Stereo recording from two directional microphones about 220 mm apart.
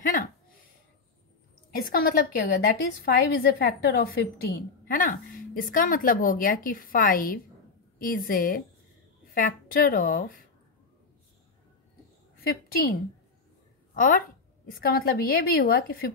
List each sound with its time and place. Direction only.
1.7 s a woman's voice: 40° left (ahead or behind)
12.4 s a woman's voice: 45° left (ahead or behind)
13.9 s a woman's voice: 40° left (ahead or behind)